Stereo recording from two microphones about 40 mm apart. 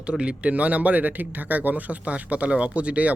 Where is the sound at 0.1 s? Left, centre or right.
Right.